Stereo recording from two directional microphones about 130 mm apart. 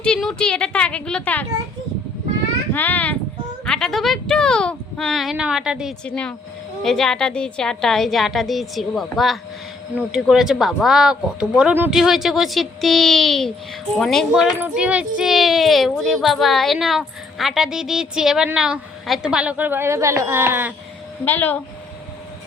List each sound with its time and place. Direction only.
0.0 s a woman's voice: 5° left (ahead or behind)
2.7 s a woman's voice: 15° left (ahead or behind); by 5.9 s 5° right (ahead or behind)
6.1 s a woman's voice: 10° left (ahead or behind)
14.6 s speech: 10° right (ahead or behind)
21.2 s a woman's voice: 15° left (ahead or behind)